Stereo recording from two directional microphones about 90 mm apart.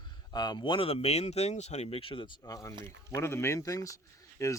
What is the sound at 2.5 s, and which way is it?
Speech, 40° left (ahead or behind).